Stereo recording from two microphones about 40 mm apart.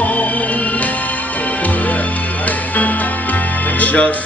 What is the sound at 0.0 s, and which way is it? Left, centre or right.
Music, left.